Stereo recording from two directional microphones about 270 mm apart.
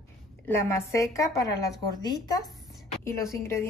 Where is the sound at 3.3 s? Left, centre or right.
Centre.